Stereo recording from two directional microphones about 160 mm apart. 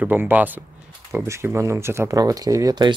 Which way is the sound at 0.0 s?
10° right (ahead or behind).